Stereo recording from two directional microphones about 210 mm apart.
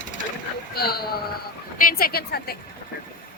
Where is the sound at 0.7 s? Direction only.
45° left (ahead or behind).